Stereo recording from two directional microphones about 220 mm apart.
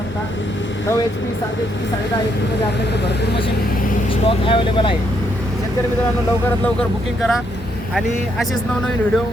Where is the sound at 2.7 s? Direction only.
50° left (ahead or behind).